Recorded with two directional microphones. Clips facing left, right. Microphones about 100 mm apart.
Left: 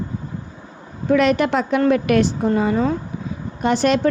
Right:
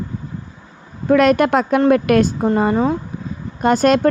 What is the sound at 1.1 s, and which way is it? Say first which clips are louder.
A woman's voice: right 3 dB; 50° right (ahead or behind).